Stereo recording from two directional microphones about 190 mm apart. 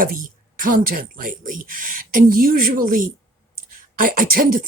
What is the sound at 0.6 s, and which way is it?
Speech, 50° right (ahead or behind).